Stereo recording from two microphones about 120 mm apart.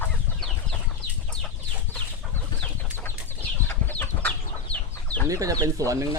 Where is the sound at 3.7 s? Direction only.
15° left (ahead or behind).